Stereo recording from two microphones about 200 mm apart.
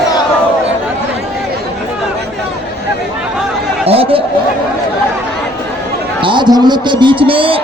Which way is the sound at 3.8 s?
30° right (ahead or behind).